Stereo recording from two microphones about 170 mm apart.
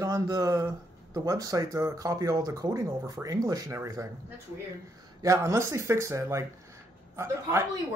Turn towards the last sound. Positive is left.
turn(degrees=-15)  # may be behind; listen again after turning